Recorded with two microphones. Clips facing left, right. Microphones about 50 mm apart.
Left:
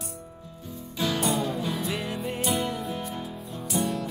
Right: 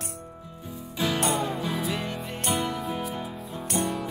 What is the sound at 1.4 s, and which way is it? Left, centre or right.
Music, centre.